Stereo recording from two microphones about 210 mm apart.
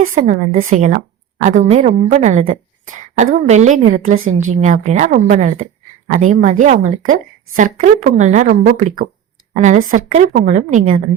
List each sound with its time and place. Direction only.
0.1 s a woman's voice: 35° right (ahead or behind)